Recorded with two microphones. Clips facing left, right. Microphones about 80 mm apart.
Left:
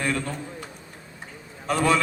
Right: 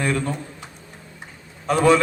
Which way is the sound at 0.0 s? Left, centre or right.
Right.